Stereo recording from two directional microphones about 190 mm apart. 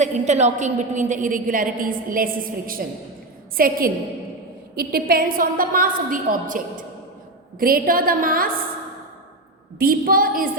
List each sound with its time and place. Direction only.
0.0 s a woman's voice: 35° right (ahead or behind)
9.7 s a woman's voice: 50° right (ahead or behind)